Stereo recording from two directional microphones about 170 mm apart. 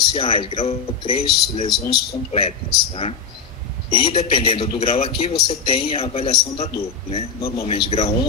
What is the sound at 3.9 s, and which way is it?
Speech, 35° left (ahead or behind).